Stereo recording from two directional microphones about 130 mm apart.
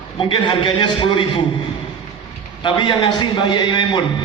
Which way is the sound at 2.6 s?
40° left (ahead or behind).